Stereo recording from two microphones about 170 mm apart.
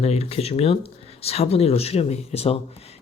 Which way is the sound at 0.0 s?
35° left (ahead or behind).